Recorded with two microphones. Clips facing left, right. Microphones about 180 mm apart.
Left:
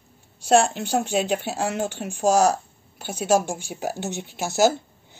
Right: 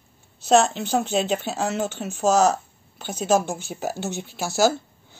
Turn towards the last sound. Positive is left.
turn(degrees=15)  # may be behind; listen again after turning